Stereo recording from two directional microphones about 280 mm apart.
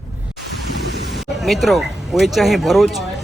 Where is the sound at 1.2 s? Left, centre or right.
Centre.